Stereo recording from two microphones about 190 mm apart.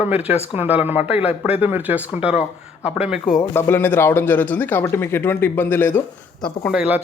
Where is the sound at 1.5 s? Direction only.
10° right (ahead or behind).